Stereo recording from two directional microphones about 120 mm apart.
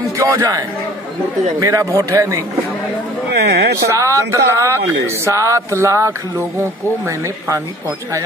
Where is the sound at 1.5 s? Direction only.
25° right (ahead or behind).